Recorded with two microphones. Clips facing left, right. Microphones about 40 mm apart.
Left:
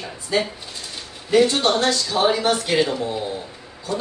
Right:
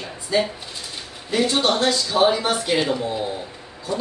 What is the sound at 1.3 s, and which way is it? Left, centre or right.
Speech, centre.